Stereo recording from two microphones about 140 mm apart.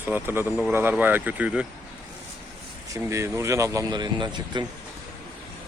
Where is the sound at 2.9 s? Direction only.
20° right (ahead or behind).